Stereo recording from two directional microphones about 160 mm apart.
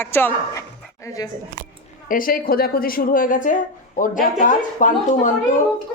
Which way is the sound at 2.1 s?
60° left (ahead or behind).